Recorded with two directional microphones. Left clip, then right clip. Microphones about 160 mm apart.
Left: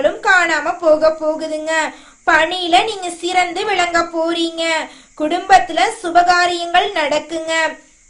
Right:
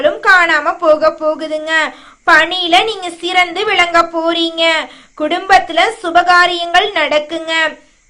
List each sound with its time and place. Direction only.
0.0 s a woman's voice: 20° right (ahead or behind)